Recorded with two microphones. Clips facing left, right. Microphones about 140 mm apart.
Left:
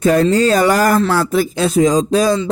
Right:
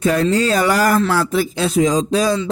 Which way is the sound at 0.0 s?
45° left (ahead or behind).